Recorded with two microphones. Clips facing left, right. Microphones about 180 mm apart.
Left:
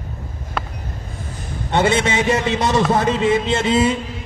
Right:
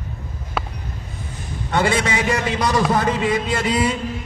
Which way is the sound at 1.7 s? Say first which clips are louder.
Left 2 dB; 25° left (ahead or behind).